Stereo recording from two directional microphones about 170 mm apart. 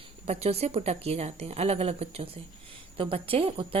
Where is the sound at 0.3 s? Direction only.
35° right (ahead or behind).